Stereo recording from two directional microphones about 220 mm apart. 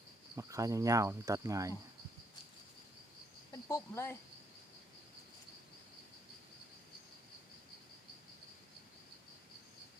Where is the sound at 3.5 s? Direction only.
10° left (ahead or behind).